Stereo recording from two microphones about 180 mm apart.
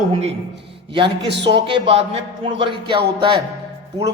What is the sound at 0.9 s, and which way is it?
Speech, 25° right (ahead or behind).